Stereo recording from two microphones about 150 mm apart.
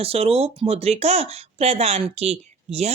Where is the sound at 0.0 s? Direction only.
40° right (ahead or behind).